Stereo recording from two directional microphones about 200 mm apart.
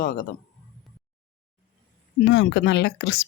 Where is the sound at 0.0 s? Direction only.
45° left (ahead or behind).